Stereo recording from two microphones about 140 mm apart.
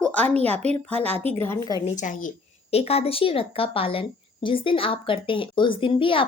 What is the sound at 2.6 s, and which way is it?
Speech, 45° left (ahead or behind).